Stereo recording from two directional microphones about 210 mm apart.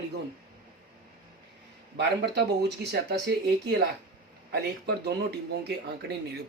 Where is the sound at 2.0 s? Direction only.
55° right (ahead or behind).